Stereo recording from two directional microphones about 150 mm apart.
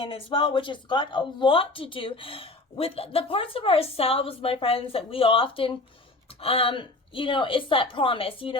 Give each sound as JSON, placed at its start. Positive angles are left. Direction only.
{"t": 0.0, "sound": "speech", "side_deg": 35}